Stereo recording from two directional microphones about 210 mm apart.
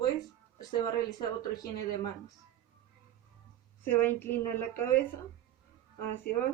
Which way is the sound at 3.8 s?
10° left (ahead or behind).